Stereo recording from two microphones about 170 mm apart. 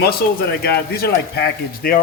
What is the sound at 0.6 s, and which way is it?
Speech, 70° left (ahead or behind).